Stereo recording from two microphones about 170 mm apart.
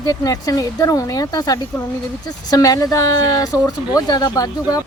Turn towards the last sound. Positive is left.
turn(degrees=20)  # may be behind; listen again after turning